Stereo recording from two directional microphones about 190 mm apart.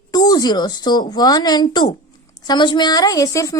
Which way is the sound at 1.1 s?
20° left (ahead or behind).